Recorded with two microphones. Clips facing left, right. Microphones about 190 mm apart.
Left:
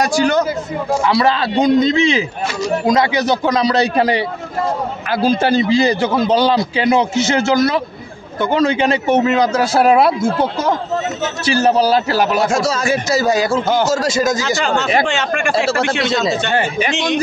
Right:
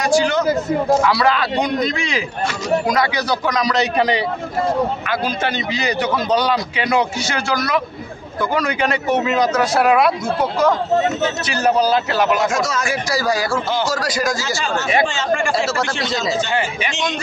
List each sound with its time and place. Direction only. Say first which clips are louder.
0.0 s a man's voice: left 2 dB; 40° left (ahead or behind)
1.0 s a man's voice: left 2 dB; 25° left (ahead or behind)
5.2 s a man's voice: left 8 dB; 30° left (ahead or behind)
14.6 s speech: even; 65° left (ahead or behind)
15.5 s a man's voice: left 4 dB; 25° left (ahead or behind)